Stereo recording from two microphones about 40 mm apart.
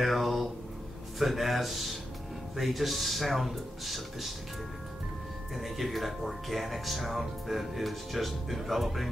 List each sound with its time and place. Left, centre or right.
0.0 s a sound: centre
1.2 s speech: centre
5.6 s speech: centre